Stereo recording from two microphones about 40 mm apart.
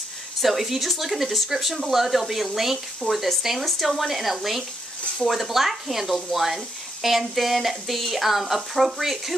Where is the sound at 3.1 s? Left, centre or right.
Left.